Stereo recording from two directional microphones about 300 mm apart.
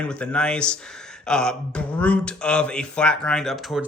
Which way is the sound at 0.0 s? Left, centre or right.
Centre.